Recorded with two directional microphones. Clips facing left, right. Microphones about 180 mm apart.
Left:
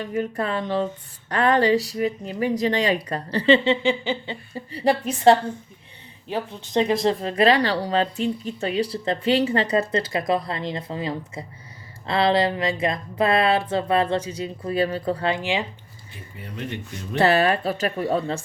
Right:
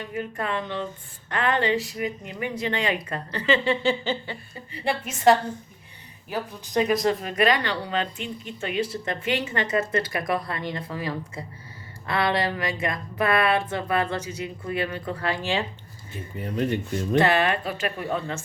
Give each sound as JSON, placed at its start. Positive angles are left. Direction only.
{"t": 0.0, "sound": "speech", "side_deg": 40}
{"t": 3.6, "sound": "speech", "side_deg": 20}
{"t": 4.7, "sound": "speech", "side_deg": 35}
{"t": 16.4, "sound": "speech", "side_deg": -40}
{"t": 17.2, "sound": "speech", "side_deg": 35}